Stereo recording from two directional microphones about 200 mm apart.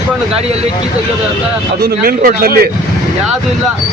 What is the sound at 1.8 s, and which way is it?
Speech, 50° right (ahead or behind).